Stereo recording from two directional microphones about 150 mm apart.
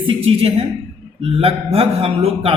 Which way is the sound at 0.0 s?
40° right (ahead or behind).